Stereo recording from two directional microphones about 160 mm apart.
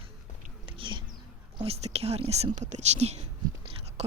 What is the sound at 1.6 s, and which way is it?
Speech, 40° right (ahead or behind).